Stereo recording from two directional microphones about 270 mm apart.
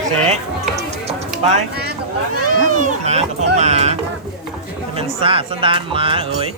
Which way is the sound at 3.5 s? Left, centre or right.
Right.